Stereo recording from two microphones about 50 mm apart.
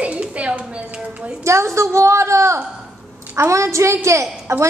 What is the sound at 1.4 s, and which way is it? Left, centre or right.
A woman's voice, right.